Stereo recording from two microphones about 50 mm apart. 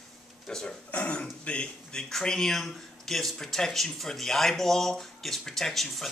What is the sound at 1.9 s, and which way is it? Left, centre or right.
Speech, centre.